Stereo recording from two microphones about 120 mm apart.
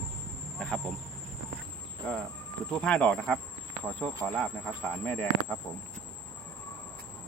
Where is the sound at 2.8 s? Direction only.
10° left (ahead or behind).